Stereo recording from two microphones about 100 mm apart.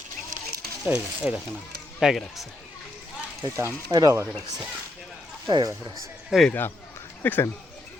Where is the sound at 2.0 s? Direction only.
Centre (ahead or behind).